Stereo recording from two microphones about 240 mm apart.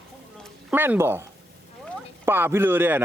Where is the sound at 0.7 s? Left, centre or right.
Centre.